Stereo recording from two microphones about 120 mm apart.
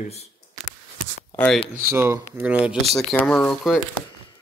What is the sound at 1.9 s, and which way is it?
Speech, 20° right (ahead or behind).